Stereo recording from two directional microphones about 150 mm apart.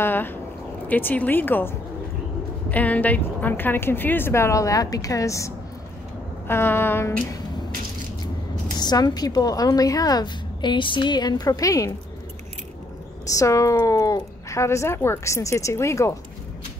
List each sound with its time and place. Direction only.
0.0 s a woman's voice: 15° left (ahead or behind)
8.7 s a woman's voice: 25° left (ahead or behind)
13.3 s a woman's voice: 20° left (ahead or behind)